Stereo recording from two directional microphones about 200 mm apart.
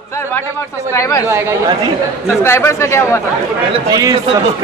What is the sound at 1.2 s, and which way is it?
Speech, 10° right (ahead or behind).